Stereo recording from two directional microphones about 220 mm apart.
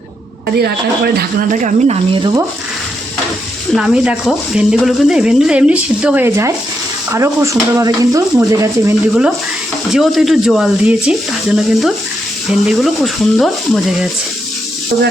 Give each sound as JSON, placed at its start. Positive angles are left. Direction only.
{"t": 0.6, "sound": "speech", "side_deg": -45}
{"t": 2.1, "sound": "speech", "side_deg": -20}
{"t": 3.8, "sound": "speech", "side_deg": -5}